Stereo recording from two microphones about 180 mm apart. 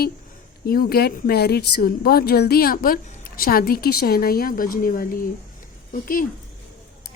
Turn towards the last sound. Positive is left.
turn(degrees=50)  # may be behind; listen again after turning